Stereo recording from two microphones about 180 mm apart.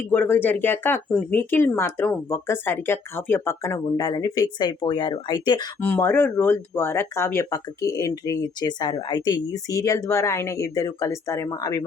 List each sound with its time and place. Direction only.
0.1 s speech: 10° left (ahead or behind)
5.8 s speech: 10° left (ahead or behind)